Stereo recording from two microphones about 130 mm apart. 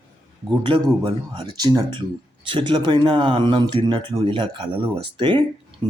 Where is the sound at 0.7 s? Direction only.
40° right (ahead or behind).